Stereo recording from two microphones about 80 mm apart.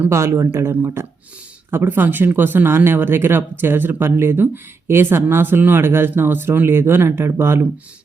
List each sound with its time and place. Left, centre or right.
0.1 s speech: right